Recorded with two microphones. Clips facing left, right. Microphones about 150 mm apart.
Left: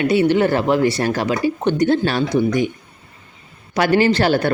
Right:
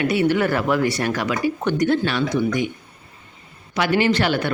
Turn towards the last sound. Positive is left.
turn(degrees=35)  # may be behind; listen again after turning